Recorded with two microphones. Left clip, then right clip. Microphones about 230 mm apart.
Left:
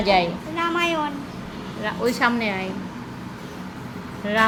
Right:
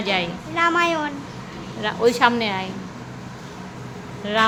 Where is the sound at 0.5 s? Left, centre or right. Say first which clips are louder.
Right 6 dB; right.